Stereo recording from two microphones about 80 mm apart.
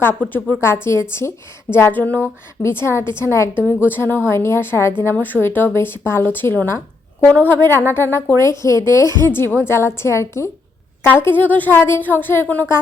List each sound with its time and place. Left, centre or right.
0.0 s speech: left
0.6 s a woman's voice: left
1.9 s a woman's voice: left
7.3 s a woman's voice: centre
7.9 s a woman's voice: left
9.0 s a woman's voice: right
9.3 s a woman's voice: left